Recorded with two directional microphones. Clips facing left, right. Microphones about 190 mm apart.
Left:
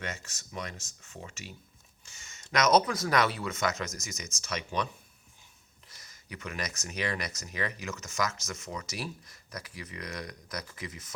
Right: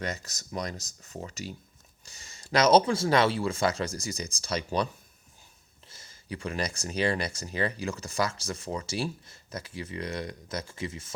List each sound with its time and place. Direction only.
0.0 s speech: 35° right (ahead or behind)
5.9 s speech: 30° right (ahead or behind)